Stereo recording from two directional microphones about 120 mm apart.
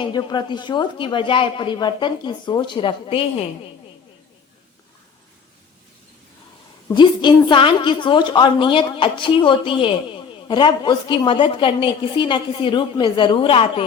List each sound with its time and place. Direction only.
0.0 s speech: 40° left (ahead or behind)
6.9 s a woman's voice: 40° left (ahead or behind)